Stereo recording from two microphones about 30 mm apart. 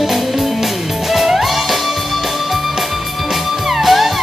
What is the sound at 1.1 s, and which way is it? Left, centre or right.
Music, centre.